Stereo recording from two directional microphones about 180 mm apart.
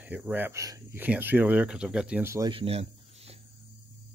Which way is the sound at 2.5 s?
35° right (ahead or behind).